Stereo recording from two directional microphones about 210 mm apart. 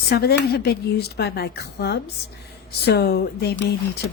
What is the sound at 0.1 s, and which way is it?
A woman's voice, 50° left (ahead or behind).